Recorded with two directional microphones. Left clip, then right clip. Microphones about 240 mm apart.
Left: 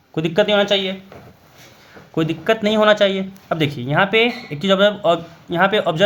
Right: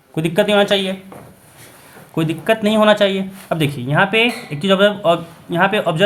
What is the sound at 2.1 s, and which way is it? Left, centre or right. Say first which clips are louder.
Speech: right 1 dB; left.